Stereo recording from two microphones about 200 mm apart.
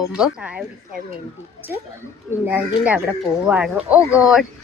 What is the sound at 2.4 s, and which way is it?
A woman's voice, 10° right (ahead or behind).